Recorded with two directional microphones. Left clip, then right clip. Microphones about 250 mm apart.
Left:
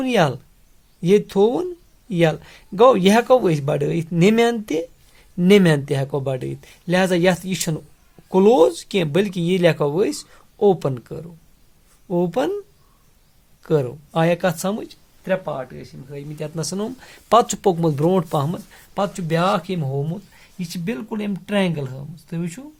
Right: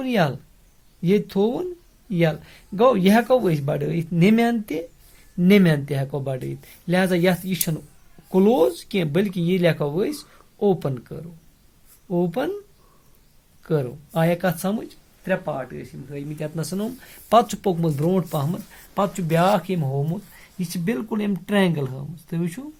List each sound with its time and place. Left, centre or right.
0.0 s speech: left
13.6 s speech: left